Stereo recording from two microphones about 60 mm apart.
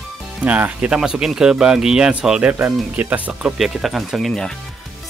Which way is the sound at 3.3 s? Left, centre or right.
Centre.